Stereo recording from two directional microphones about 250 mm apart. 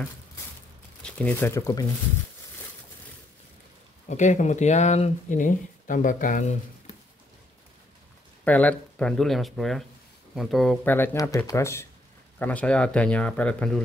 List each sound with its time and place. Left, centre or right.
1.0 s speech: centre
4.1 s speech: left
8.5 s speech: centre